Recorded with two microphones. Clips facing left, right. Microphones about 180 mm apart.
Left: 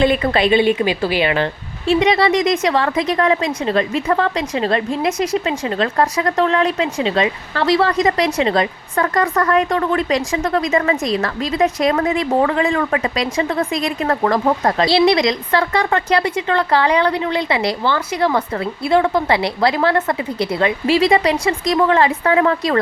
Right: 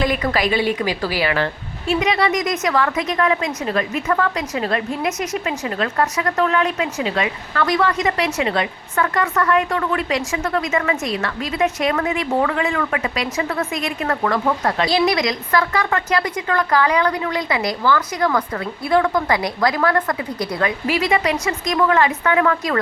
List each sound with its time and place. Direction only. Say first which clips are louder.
0.0 s a woman's voice: left 4 dB; 30° left (ahead or behind)
1.9 s a woman's voice: left 4 dB; 30° left (ahead or behind)